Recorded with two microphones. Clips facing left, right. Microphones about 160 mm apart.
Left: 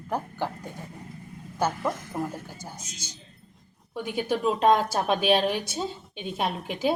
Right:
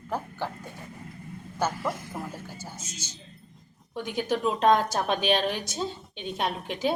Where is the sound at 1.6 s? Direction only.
15° left (ahead or behind).